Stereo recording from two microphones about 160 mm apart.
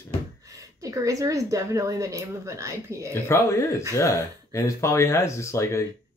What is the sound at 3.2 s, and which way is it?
Speech, 15° left (ahead or behind).